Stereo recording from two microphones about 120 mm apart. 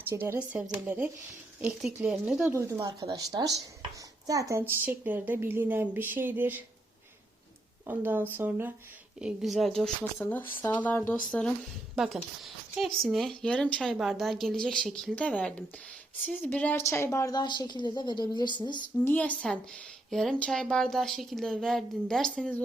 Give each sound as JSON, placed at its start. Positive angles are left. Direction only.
{"t": 0.1, "sound": "a woman's voice", "side_deg": -20}
{"t": 2.2, "sound": "speech", "side_deg": -5}
{"t": 2.5, "sound": "a woman's voice", "side_deg": -20}
{"t": 3.0, "sound": "a woman's voice", "side_deg": -35}
{"t": 7.9, "sound": "a woman's voice", "side_deg": -15}
{"t": 9.2, "sound": "speech", "side_deg": 0}
{"t": 10.0, "sound": "speech", "side_deg": 15}
{"t": 13.9, "sound": "speech", "side_deg": -5}
{"t": 16.8, "sound": "a woman's voice", "side_deg": 25}
{"t": 17.4, "sound": "a woman's voice", "side_deg": 40}
{"t": 19.0, "sound": "speech", "side_deg": 15}